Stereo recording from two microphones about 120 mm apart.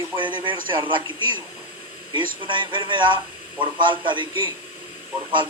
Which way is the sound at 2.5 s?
40° right (ahead or behind).